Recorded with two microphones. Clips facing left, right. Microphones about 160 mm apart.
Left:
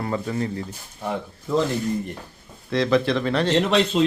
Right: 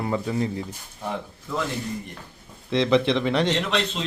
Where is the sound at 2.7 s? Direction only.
20° right (ahead or behind).